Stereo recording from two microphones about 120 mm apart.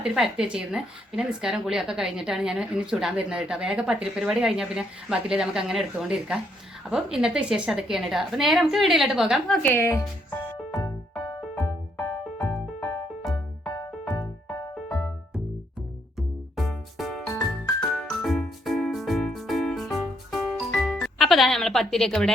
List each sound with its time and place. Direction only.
0.0 s a woman's voice: 5° right (ahead or behind)
9.7 s speech: 20° left (ahead or behind)
11.9 s music: 10° left (ahead or behind)
16.1 s music: centre (ahead or behind)